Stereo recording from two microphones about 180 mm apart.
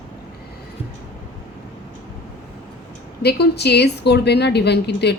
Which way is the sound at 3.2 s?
65° left (ahead or behind).